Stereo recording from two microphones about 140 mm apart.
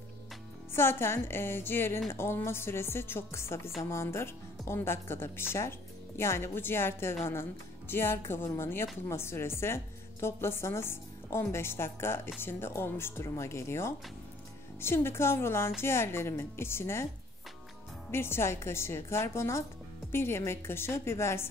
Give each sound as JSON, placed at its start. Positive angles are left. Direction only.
{"t": 0.7, "sound": "speech", "side_deg": 15}
{"t": 18.1, "sound": "a woman's voice", "side_deg": 15}